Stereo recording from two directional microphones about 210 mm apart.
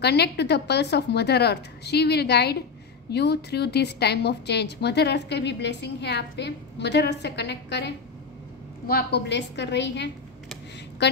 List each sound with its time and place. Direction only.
0.0 s a woman's voice: 50° left (ahead or behind)